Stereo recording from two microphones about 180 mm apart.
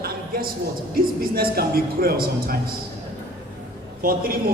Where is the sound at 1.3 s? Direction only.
55° right (ahead or behind).